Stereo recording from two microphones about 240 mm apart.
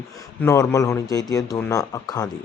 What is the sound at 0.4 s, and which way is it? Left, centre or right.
Speech, centre.